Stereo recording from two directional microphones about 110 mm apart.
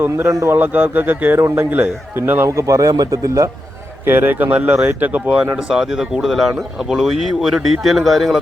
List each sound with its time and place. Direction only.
0.0 s a man's voice: 25° right (ahead or behind)
0.5 s a man's voice: 15° right (ahead or behind)
4.0 s speech: 20° right (ahead or behind); by 8.4 s centre (ahead or behind)